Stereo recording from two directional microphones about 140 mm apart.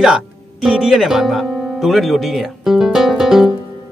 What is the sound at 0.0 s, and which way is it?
Speech, 5° right (ahead or behind).